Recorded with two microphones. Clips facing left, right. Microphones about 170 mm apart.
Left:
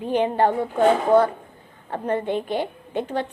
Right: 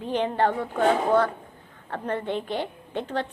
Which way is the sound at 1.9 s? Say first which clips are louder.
Left 4 dB; 15° left (ahead or behind).